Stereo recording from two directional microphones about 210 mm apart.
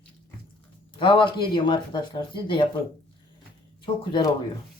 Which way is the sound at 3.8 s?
20° left (ahead or behind).